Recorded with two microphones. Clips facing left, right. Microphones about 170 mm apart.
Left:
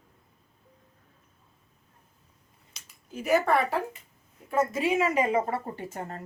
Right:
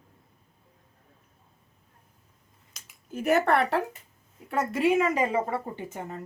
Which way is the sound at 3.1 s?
60° right (ahead or behind).